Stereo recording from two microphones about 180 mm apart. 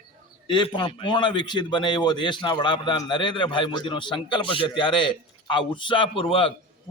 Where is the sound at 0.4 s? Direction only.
25° left (ahead or behind).